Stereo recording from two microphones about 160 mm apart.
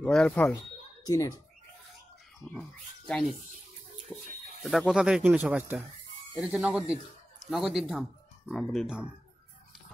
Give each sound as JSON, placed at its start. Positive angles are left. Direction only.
{"t": 0.0, "sound": "speech", "side_deg": 5}
{"t": 1.0, "sound": "speech", "side_deg": 20}
{"t": 4.1, "sound": "speech", "side_deg": 5}